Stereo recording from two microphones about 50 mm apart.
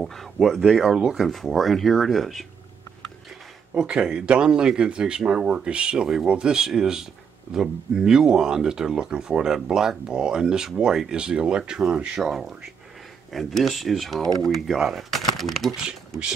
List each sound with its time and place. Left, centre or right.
0.0 s speech: centre
0.6 s speech: centre
1.2 s speech: centre
3.7 s speech: centre
12.2 s speech: centre
14.8 s speech: centre
15.0 s speech: centre